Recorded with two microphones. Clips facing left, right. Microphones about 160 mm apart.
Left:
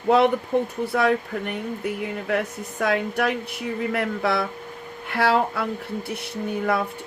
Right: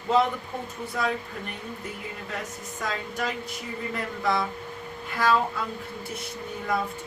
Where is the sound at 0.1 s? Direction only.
65° left (ahead or behind).